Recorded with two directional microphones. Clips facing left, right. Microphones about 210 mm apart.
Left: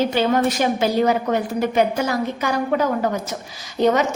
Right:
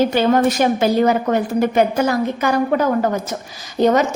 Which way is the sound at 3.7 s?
40° right (ahead or behind).